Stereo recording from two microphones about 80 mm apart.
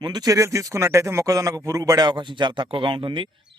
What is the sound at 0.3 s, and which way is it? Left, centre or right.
A man's voice, right.